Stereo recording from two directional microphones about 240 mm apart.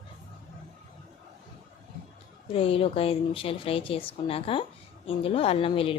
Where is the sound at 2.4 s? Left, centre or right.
Left.